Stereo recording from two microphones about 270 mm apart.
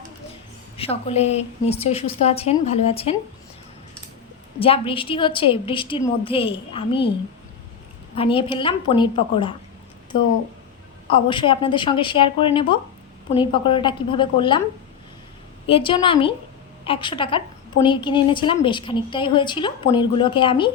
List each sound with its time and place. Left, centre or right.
0.8 s a woman's voice: left
4.6 s a woman's voice: centre
8.1 s a woman's voice: centre
11.1 s a woman's voice: centre
15.6 s a woman's voice: centre